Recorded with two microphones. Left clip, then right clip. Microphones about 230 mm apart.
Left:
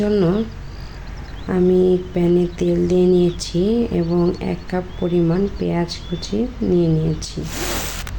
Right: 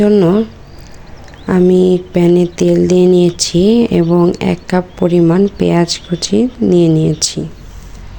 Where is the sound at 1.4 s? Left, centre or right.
Right.